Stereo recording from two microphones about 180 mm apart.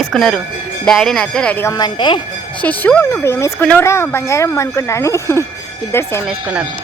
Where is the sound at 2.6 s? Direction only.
10° left (ahead or behind).